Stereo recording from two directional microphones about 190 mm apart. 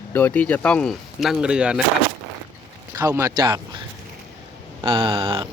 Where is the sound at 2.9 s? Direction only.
15° right (ahead or behind).